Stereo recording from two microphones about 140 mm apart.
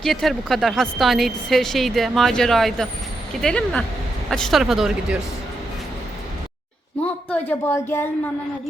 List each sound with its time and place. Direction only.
0.0 s a woman's voice: centre (ahead or behind)
7.0 s a woman's voice: 10° left (ahead or behind)